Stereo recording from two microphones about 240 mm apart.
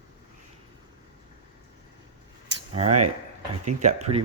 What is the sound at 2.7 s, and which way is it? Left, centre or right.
Speech, right.